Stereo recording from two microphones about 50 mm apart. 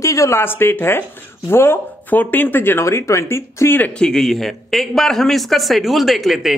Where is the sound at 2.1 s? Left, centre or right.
Left.